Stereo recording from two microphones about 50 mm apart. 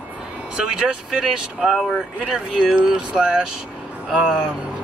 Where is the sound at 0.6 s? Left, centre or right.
Centre.